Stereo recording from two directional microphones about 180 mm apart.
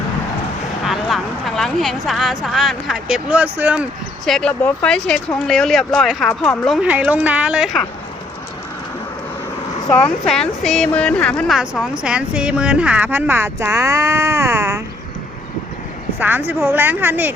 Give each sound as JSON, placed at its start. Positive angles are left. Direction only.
{"t": 0.9, "sound": "speech", "side_deg": 0}
{"t": 4.3, "sound": "speech", "side_deg": 5}
{"t": 10.0, "sound": "a woman's voice", "side_deg": 5}
{"t": 16.1, "sound": "a woman's voice", "side_deg": -10}